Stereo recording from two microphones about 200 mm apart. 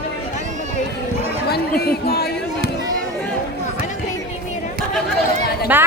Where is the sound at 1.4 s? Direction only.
50° left (ahead or behind).